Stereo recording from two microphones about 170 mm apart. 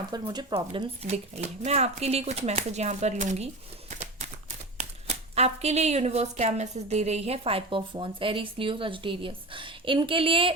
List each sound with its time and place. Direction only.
0.1 s speech: 25° right (ahead or behind)
0.5 s speech: 35° right (ahead or behind)